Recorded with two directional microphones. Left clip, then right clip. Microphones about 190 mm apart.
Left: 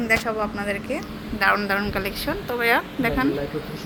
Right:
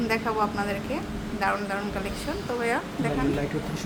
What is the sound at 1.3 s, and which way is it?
A woman's voice, 30° left (ahead or behind).